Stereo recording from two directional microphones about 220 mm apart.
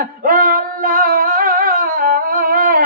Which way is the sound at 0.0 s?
40° right (ahead or behind).